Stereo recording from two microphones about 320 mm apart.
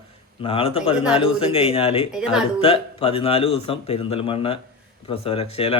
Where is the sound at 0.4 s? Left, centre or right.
Centre.